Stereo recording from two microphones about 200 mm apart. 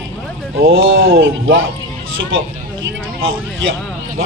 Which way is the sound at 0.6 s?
80° right.